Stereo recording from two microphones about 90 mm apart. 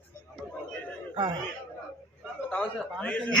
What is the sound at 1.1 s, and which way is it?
Speech, 60° right (ahead or behind).